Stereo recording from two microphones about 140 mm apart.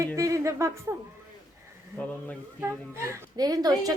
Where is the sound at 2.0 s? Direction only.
10° left (ahead or behind).